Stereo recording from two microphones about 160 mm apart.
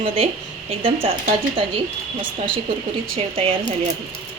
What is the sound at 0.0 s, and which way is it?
Speech, 35° right (ahead or behind).